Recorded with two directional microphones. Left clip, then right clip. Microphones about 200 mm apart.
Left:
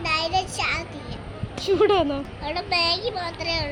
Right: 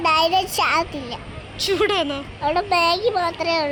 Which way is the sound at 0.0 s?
55° right (ahead or behind).